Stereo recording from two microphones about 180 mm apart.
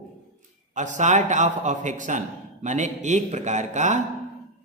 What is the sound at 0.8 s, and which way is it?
A man's voice, 40° right (ahead or behind).